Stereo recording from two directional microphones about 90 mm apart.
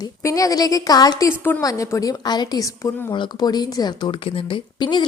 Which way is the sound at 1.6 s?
40° left (ahead or behind).